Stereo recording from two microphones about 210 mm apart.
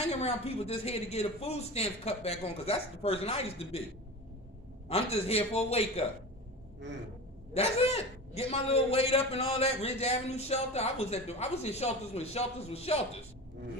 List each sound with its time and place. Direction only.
0.1 s a man's voice: 30° left (ahead or behind)
4.8 s a man's voice: 30° left (ahead or behind)
7.5 s a man's voice: 30° left (ahead or behind)